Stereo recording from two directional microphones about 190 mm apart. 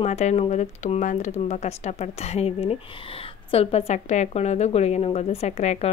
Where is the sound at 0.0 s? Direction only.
35° left (ahead or behind).